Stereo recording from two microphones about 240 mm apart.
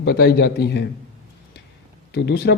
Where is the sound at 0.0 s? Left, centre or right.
Left.